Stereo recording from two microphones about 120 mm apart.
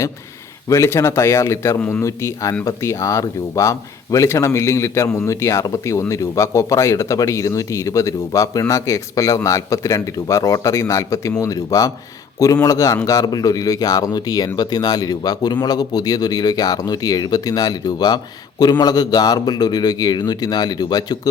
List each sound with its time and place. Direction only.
0.7 s speech: 25° left (ahead or behind)